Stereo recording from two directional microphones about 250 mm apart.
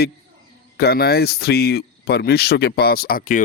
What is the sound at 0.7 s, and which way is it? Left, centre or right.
Speech, left.